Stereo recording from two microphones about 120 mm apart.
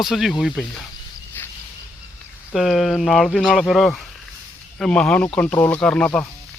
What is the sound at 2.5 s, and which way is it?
Speech, centre (ahead or behind).